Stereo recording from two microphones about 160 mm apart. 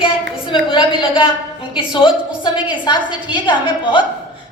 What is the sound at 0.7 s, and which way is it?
A woman's voice, 30° left (ahead or behind).